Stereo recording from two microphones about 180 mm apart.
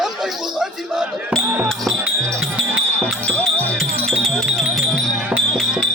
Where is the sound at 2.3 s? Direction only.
Centre (ahead or behind).